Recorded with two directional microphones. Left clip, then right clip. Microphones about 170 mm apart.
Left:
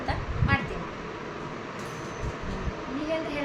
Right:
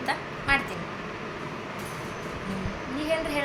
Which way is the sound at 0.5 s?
15° right (ahead or behind).